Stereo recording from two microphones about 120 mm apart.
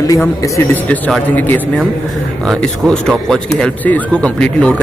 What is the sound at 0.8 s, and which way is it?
Speech, 10° left (ahead or behind).